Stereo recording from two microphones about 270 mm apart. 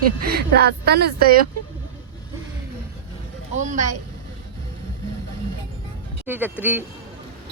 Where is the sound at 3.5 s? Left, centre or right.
Right.